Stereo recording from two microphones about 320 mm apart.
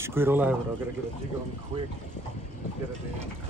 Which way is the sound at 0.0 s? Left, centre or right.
Centre.